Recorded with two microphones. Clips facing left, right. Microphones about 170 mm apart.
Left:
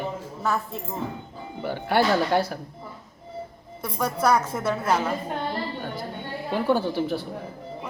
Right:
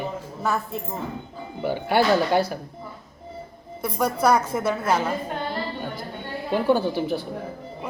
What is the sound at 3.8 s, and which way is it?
A woman's voice, centre (ahead or behind).